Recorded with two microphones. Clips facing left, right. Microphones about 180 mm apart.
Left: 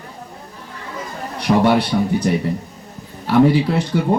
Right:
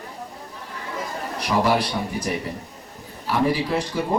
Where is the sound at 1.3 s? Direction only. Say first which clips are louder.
Left 6 dB; 65° left (ahead or behind).